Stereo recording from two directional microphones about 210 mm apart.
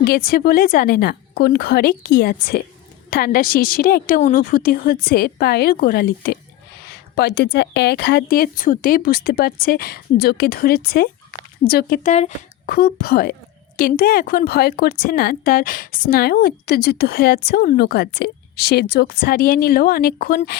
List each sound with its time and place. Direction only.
0.0 s a woman's voice: 45° left (ahead or behind)